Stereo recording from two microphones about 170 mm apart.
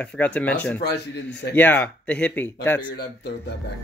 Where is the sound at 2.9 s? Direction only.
80° left.